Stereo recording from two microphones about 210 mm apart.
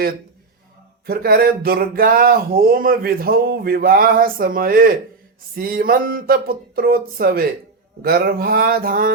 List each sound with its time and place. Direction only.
1.0 s speech: 45° right (ahead or behind)